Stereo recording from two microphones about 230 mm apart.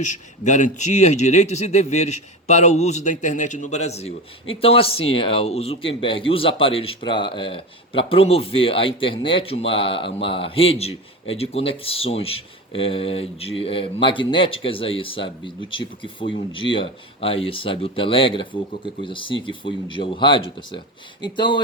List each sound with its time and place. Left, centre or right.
0.0 s a man's voice: left